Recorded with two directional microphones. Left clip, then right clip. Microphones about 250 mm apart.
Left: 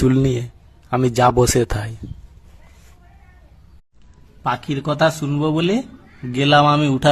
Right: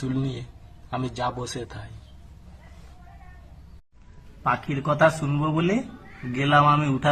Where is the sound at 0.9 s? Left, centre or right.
Left.